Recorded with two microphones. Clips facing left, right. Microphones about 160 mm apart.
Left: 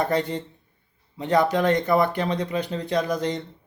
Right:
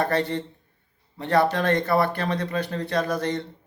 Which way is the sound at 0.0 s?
15° left (ahead or behind).